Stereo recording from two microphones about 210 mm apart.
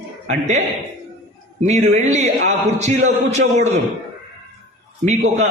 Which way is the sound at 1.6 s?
35° right (ahead or behind).